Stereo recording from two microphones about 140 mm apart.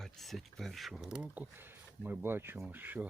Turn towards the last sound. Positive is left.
turn(degrees=-15)  # may be behind; listen again after turning